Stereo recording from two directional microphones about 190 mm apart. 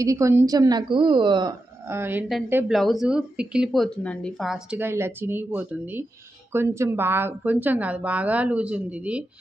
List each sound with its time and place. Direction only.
0.0 s a woman's voice: 15° right (ahead or behind)
1.9 s a woman's voice: 10° right (ahead or behind)